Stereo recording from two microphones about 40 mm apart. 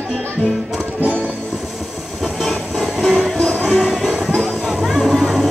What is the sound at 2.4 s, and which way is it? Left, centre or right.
Music, centre.